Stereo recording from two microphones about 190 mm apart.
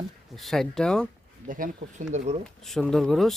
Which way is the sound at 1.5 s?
45° right (ahead or behind).